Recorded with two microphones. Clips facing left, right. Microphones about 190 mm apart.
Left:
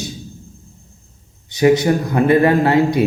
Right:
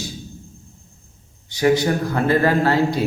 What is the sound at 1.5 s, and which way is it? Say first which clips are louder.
A man's voice: left 4 dB; 20° left (ahead or behind).